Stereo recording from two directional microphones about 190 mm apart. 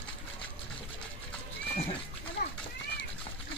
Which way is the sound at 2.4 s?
50° left (ahead or behind).